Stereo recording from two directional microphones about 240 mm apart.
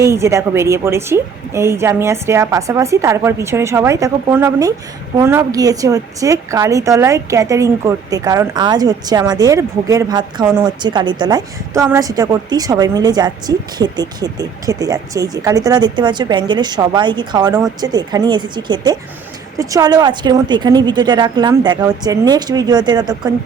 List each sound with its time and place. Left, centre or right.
0.0 s a woman's voice: centre